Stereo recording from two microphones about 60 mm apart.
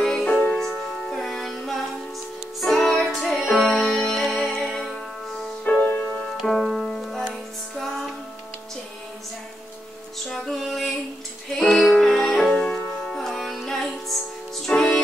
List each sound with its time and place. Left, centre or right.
0.0 s music: centre
0.6 s music: centre
5.7 s music: left
6.4 s music: centre
10.2 s music: centre
12.4 s music: centre
13.0 s music: centre
14.7 s music: centre